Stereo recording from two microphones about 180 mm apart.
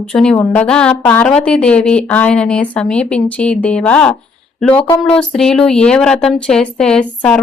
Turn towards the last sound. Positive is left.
turn(degrees=5)  # may be behind; listen again after turning